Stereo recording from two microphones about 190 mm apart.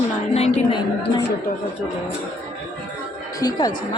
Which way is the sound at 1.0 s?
60° left (ahead or behind).